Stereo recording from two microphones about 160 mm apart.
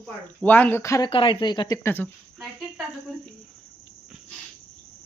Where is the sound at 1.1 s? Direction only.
30° left (ahead or behind).